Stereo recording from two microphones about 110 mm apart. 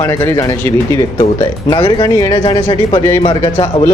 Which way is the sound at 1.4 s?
45° left (ahead or behind).